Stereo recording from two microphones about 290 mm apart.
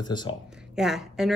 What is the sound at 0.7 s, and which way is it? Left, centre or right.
Speech, centre.